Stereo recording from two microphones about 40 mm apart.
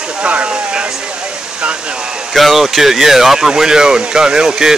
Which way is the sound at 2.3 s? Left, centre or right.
Centre.